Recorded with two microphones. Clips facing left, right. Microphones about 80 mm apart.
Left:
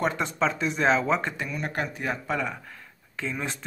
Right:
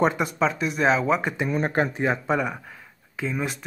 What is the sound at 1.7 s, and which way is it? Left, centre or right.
Speech, right.